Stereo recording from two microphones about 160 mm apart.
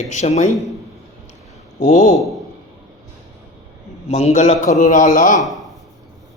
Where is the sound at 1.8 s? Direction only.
50° left (ahead or behind).